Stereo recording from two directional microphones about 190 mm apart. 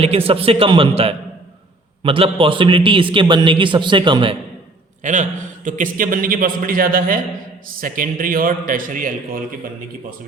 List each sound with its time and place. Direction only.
0.0 s a man's voice: 30° right (ahead or behind)
5.0 s a man's voice: 40° right (ahead or behind)